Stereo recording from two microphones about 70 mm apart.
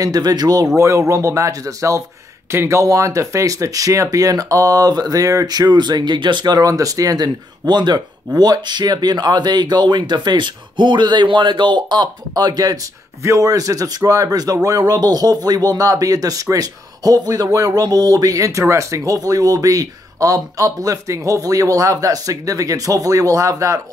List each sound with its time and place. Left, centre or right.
0.0 s speech: right
0.7 s speech: right
2.5 s speech: right
2.8 s speech: right
6.7 s speech: right
13.2 s speech: right